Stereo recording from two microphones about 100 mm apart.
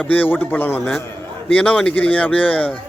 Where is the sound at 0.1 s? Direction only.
20° left (ahead or behind).